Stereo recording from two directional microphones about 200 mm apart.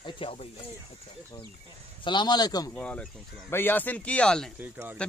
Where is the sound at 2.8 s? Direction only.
5° left (ahead or behind).